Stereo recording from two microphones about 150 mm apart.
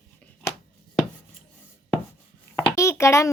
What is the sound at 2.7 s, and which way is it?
Speech, 20° left (ahead or behind).